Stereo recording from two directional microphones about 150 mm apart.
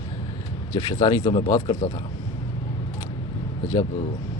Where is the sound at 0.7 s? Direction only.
30° left (ahead or behind).